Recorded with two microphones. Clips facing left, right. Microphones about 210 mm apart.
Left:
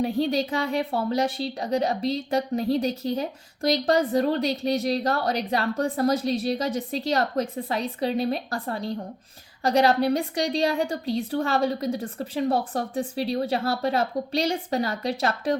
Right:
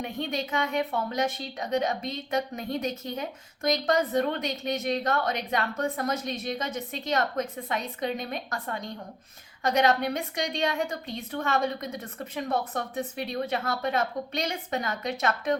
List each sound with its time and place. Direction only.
0.0 s a woman's voice: 35° left (ahead or behind)